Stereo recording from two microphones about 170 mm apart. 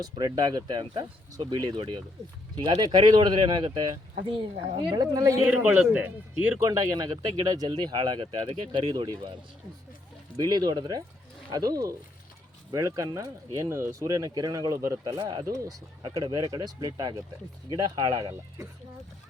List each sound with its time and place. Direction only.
0.0 s speech: 25° right (ahead or behind)
5.4 s a man's voice: 10° right (ahead or behind)
6.7 s speech: 20° right (ahead or behind)